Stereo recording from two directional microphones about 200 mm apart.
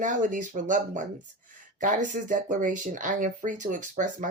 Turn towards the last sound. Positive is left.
turn(degrees=-40)  # may be behind; listen again after turning